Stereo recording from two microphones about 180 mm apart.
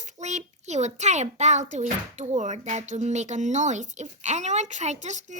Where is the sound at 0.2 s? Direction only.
40° right (ahead or behind).